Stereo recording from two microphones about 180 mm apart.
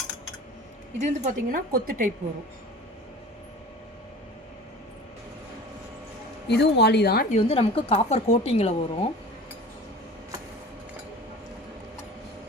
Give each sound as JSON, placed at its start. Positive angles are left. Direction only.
{"t": 0.9, "sound": "a woman's voice", "side_deg": -40}
{"t": 6.5, "sound": "speech", "side_deg": 70}
{"t": 7.3, "sound": "speech", "side_deg": 35}